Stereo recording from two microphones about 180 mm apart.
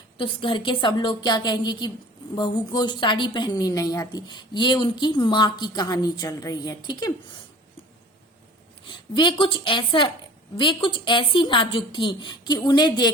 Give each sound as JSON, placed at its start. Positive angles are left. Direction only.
{"t": 0.2, "sound": "a woman's voice", "side_deg": 30}
{"t": 8.9, "sound": "a woman's voice", "side_deg": 25}